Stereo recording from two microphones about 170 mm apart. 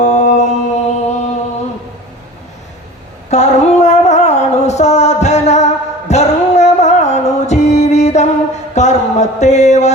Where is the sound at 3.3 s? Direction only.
40° left (ahead or behind).